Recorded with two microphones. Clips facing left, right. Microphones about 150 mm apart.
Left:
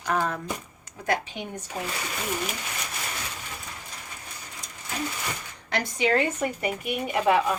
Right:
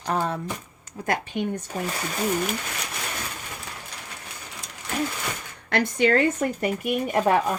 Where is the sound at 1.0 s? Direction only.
50° right (ahead or behind).